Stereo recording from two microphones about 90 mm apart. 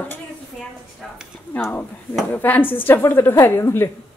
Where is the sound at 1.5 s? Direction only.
20° left (ahead or behind).